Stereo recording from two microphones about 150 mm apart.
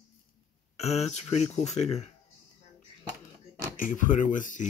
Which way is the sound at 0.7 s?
45° left (ahead or behind).